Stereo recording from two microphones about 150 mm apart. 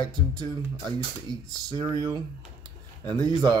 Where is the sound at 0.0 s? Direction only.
30° right (ahead or behind).